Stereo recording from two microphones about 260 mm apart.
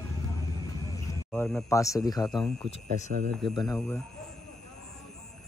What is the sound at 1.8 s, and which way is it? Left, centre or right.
Speech, centre.